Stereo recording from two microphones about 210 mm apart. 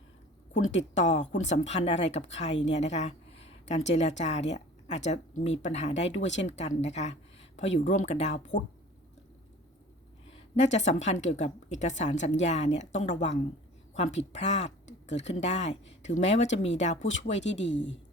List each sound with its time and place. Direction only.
0.5 s speech: 65° left (ahead or behind)
0.9 s a woman's voice: 35° left (ahead or behind)
10.5 s a woman's voice: 35° left (ahead or behind)
17.0 s speech: 65° left (ahead or behind)